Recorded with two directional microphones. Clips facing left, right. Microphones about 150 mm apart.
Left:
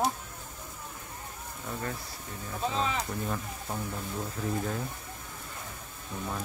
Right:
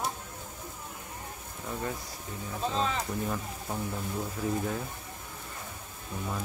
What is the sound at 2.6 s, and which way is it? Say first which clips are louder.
Speech: even; 5° left (ahead or behind).